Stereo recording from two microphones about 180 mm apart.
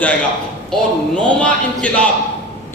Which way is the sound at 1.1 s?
5° left (ahead or behind).